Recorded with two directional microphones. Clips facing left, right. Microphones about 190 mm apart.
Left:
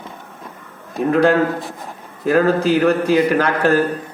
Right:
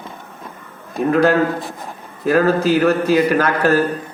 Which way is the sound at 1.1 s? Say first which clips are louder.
Even; 20° left (ahead or behind).